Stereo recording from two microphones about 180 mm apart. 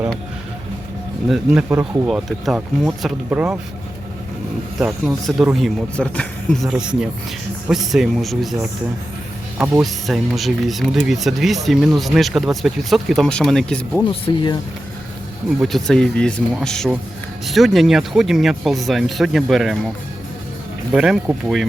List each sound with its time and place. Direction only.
1.3 s speech: 5° right (ahead or behind)
2.0 s speech: centre (ahead or behind)
4.8 s speech: centre (ahead or behind)
9.6 s speech: centre (ahead or behind)
14.3 s speech: 25° left (ahead or behind)
15.6 s speech: centre (ahead or behind)
20.9 s speech: 5° right (ahead or behind)